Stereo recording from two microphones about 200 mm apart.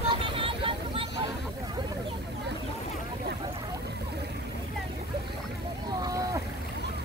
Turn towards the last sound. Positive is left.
turn(degrees=-15)  # may be behind; listen again after turning